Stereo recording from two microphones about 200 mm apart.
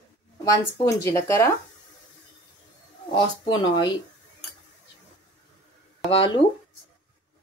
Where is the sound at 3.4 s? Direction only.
20° left (ahead or behind).